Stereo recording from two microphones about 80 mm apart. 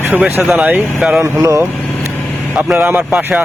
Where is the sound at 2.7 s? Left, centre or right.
Right.